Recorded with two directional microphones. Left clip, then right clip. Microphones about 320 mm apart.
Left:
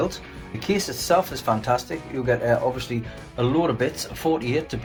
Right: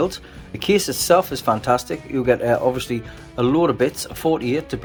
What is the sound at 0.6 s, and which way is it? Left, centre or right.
Speech, right.